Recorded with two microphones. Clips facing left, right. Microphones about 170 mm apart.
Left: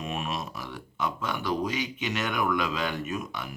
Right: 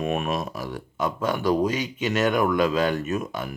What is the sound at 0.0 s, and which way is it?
Speech, 55° right (ahead or behind).